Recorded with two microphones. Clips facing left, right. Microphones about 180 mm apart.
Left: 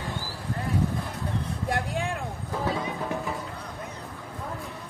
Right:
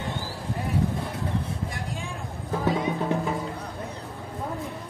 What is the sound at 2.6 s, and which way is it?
Music, 20° right (ahead or behind).